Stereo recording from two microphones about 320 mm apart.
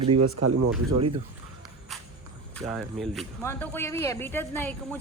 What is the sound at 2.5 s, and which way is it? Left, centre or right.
Speech, centre.